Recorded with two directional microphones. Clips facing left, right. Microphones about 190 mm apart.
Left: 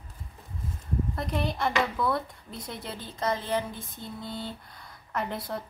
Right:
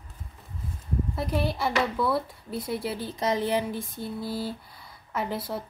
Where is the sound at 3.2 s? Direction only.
15° right (ahead or behind).